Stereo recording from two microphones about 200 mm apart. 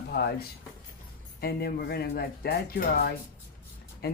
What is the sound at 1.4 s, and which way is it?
Speech, 50° left (ahead or behind).